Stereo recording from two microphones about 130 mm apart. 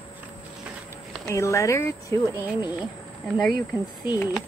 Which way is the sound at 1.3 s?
25° left (ahead or behind).